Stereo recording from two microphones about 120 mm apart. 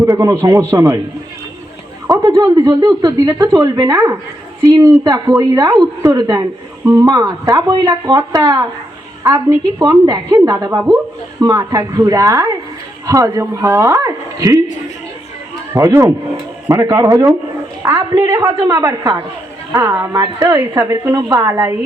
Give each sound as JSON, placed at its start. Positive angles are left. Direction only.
{"t": 0.0, "sound": "speech", "side_deg": -25}
{"t": 2.0, "sound": "speech", "side_deg": -25}
{"t": 9.2, "sound": "speech", "side_deg": -20}
{"t": 10.4, "sound": "speech", "side_deg": -35}
{"t": 15.7, "sound": "speech", "side_deg": -25}